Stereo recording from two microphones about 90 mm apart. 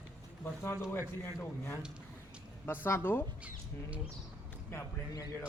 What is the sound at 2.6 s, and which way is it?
Speech, 25° left (ahead or behind).